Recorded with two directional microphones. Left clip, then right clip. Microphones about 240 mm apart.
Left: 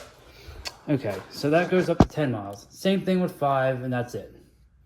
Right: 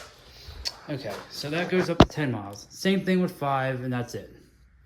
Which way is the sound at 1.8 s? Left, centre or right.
Centre.